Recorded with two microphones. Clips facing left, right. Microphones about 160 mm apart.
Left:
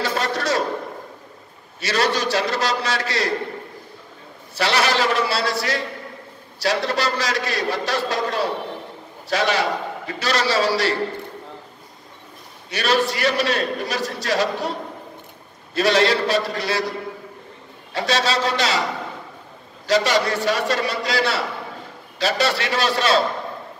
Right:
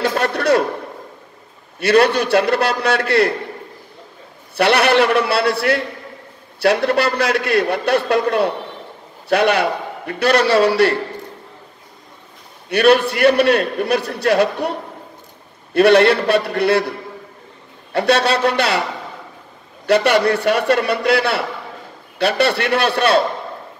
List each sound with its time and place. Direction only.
0.0 s a sound: 60° right (ahead or behind)
1.8 s a man's voice: 60° right (ahead or behind)
4.6 s a man's voice: 60° right (ahead or behind)
12.6 s a man's voice: 60° right (ahead or behind)
17.9 s a man's voice: 60° right (ahead or behind)
19.9 s a man's voice: 60° right (ahead or behind)